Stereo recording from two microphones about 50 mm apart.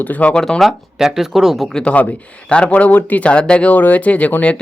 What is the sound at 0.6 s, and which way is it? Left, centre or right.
Speech, centre.